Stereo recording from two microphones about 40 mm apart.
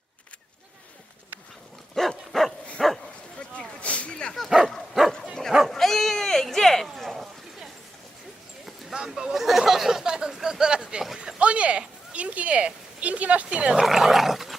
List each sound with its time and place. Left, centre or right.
2.0 s dog: centre
2.8 s bow-wow: centre
3.8 s a sound: left
4.4 s dog: centre
5.5 s sheep: centre
5.7 s cat: centre
6.8 s a sound: centre
9.0 s a sound: centre; by 11.8 s right
12.1 s dog: right
13.8 s dog: centre